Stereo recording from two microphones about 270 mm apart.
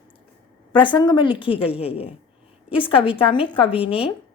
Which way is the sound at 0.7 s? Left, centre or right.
Centre.